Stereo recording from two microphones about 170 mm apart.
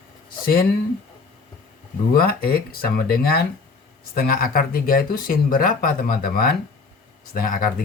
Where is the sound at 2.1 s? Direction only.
65° left (ahead or behind).